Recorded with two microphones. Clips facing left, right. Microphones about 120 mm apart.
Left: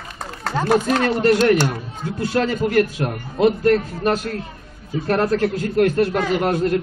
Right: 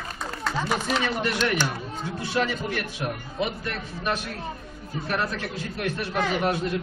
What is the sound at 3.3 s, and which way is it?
Speech, 60° left (ahead or behind).